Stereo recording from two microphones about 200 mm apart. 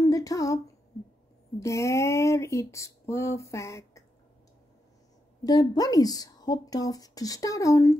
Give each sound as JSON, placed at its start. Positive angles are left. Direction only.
{"t": 0.0, "sound": "a sound", "side_deg": 15}
{"t": 1.6, "sound": "speech", "side_deg": 15}
{"t": 5.4, "sound": "a woman's voice", "side_deg": 20}